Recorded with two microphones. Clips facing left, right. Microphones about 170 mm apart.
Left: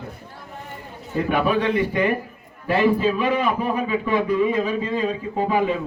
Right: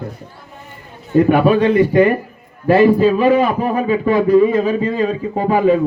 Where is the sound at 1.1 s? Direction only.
40° right (ahead or behind).